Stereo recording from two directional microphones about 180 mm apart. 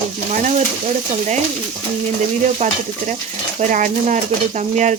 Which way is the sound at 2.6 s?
40° right (ahead or behind).